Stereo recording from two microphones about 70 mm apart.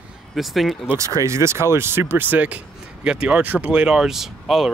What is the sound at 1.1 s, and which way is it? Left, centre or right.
Speech, right.